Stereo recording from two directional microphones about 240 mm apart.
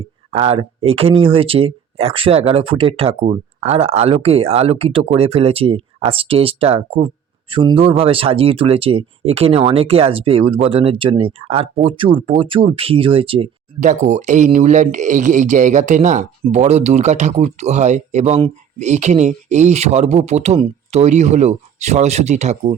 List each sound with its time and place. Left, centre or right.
0.3 s speech: right